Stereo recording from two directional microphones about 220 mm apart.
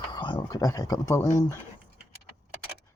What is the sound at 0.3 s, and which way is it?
Speech, 15° left (ahead or behind).